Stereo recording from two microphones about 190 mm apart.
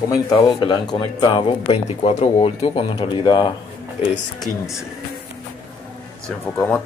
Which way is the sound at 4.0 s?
35° left (ahead or behind).